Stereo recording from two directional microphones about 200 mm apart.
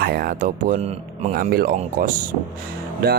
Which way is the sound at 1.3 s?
45° right (ahead or behind).